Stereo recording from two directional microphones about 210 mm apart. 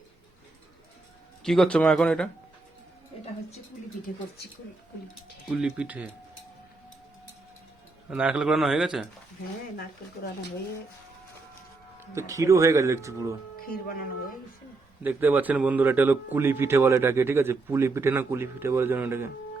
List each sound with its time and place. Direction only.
1.5 s a man's voice: 5° left (ahead or behind)
4.1 s speech: 40° left (ahead or behind)
5.5 s a man's voice: 5° right (ahead or behind)
8.1 s a man's voice: 5° right (ahead or behind)
12.1 s speech: 15° right (ahead or behind)
13.6 s speech: 45° left (ahead or behind)
15.0 s speech: 10° right (ahead or behind)